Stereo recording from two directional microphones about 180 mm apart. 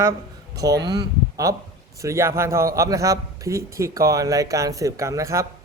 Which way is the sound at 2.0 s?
15° right (ahead or behind).